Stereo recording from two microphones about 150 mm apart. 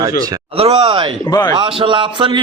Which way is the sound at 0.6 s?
40° right (ahead or behind).